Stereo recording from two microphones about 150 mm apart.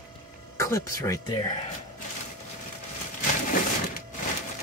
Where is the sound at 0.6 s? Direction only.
20° left (ahead or behind).